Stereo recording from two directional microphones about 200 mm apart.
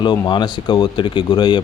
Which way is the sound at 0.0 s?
20° left (ahead or behind).